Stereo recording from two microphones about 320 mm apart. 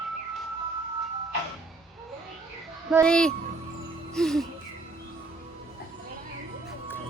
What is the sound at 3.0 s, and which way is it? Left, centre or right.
Speech, centre.